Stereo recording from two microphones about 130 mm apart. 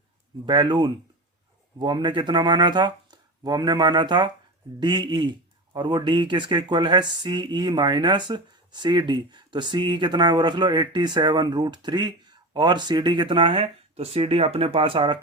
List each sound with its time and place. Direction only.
0.4 s a man's voice: 35° right (ahead or behind)